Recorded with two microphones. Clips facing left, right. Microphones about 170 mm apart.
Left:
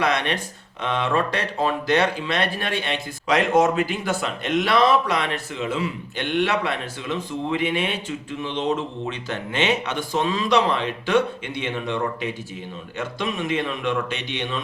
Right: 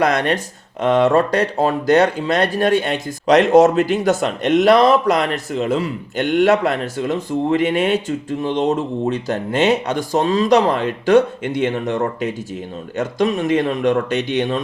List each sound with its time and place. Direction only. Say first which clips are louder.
0.0 s speech: right 6 dB; 45° right (ahead or behind)